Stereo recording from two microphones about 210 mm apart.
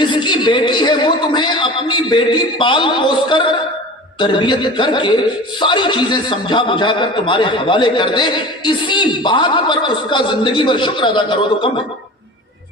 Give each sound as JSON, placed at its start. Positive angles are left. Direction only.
{"t": 0.0, "sound": "a man's voice", "side_deg": 20}